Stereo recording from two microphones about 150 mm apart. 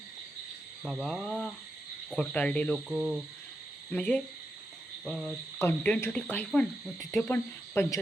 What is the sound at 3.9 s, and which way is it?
Speech, 10° left (ahead or behind).